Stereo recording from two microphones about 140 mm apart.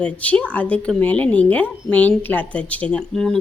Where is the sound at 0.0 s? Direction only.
10° left (ahead or behind).